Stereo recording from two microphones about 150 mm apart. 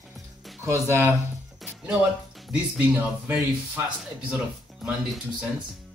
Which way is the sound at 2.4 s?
5° right (ahead or behind).